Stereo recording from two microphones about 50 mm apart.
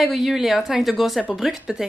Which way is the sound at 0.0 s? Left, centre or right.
Centre.